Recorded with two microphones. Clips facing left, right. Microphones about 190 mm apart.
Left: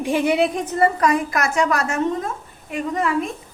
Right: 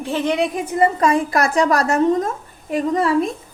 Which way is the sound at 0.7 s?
20° right (ahead or behind).